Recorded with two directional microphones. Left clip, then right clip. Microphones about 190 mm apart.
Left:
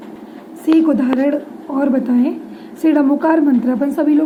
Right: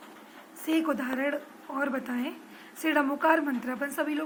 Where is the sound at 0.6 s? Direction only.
5° left (ahead or behind).